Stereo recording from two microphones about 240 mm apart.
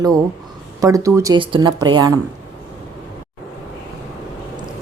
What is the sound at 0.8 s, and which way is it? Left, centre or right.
Speech, centre.